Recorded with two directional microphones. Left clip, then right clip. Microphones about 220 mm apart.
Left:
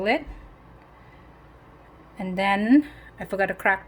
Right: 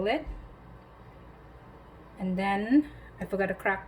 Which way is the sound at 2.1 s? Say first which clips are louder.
Left 6 dB; 50° left (ahead or behind).